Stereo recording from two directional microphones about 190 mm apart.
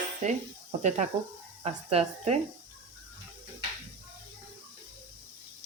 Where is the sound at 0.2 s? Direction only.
45° right (ahead or behind).